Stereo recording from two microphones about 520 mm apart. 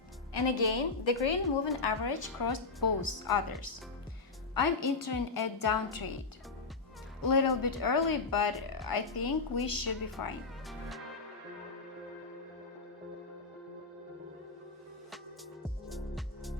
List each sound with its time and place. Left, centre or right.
0.3 s a woman's voice: left
4.5 s speech: left
7.2 s speech: left
10.7 s music: centre
15.9 s music: centre